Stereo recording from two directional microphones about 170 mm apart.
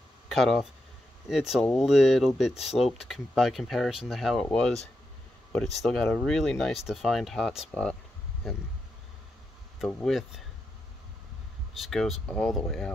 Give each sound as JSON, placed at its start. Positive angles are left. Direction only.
{"t": 0.3, "sound": "speech", "side_deg": 0}
{"t": 9.8, "sound": "speech", "side_deg": 5}
{"t": 11.8, "sound": "speech", "side_deg": 0}